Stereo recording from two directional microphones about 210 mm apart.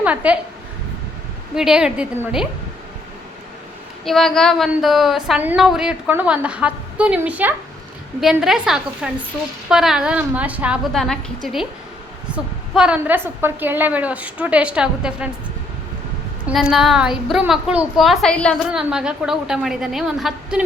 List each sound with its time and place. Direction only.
0.0 s a woman's voice: 5° right (ahead or behind)
1.5 s a woman's voice: 5° right (ahead or behind)
4.0 s a woman's voice: centre (ahead or behind)
16.5 s a woman's voice: centre (ahead or behind)